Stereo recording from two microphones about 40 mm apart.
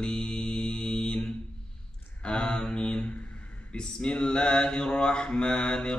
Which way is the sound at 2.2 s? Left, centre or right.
Left.